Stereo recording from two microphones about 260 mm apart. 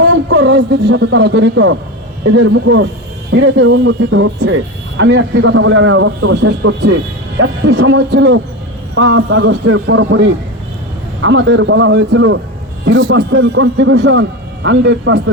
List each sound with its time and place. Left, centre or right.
0.0 s speech: right